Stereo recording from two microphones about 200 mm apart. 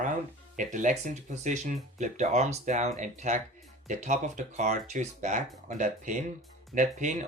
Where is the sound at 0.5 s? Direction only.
40° right (ahead or behind).